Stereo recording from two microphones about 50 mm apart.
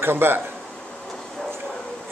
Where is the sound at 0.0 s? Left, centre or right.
Right.